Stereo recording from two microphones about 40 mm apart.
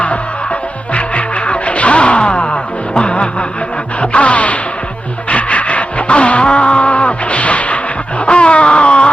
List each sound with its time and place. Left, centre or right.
0.9 s music: left
4.0 s gasp: left
5.3 s music: left
8.3 s a sound: left